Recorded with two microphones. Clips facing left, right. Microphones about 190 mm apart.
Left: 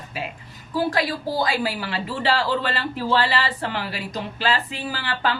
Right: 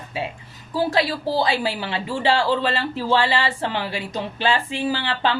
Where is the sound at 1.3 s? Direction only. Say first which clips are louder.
Right 2 dB; 30° right (ahead or behind).